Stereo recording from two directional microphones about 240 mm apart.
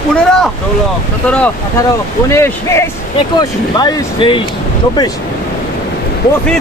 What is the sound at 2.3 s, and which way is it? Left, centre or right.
Speech, centre.